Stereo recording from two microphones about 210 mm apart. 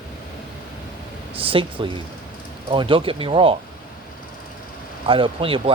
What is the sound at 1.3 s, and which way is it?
Speech, 25° right (ahead or behind).